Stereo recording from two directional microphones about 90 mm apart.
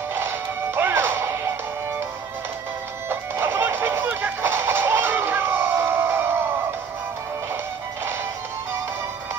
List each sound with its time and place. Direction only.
0.7 s whip: 25° right (ahead or behind)
3.1 s music: 25° right (ahead or behind)